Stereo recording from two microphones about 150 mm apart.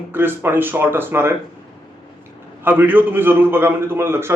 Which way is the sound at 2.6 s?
15° right (ahead or behind).